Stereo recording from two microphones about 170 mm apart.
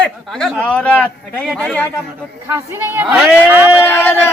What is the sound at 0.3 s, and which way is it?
A man's voice, 5° left (ahead or behind).